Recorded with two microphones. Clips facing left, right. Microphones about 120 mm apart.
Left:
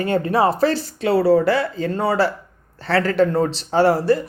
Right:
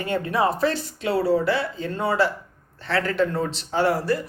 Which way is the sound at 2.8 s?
35° left (ahead or behind).